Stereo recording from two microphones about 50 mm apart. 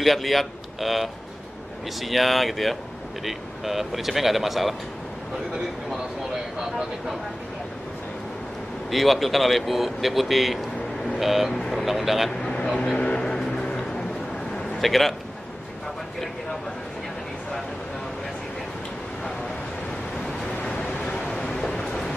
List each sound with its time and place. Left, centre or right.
0.0 s a man's voice: centre
6.6 s speech: centre
8.9 s speech: centre
12.7 s speech: left
13.2 s a sound: centre
21.8 s a sound: centre